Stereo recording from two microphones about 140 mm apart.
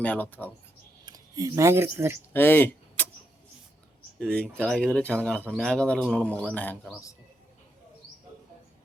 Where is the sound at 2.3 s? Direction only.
15° left (ahead or behind).